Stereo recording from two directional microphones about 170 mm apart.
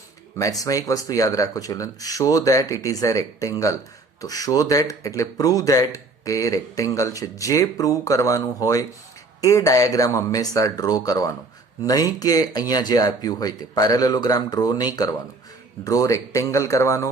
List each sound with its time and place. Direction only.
0.3 s speech: 20° left (ahead or behind)